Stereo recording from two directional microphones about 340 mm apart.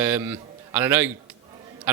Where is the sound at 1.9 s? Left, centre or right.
Centre.